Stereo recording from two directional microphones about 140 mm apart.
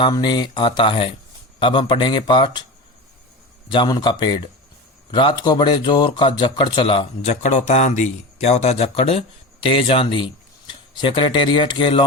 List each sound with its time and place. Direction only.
0.0 s a man's voice: 30° left (ahead or behind)
3.7 s a man's voice: 30° left (ahead or behind)
7.3 s a man's voice: 55° left (ahead or behind); by 12.0 s 35° left (ahead or behind)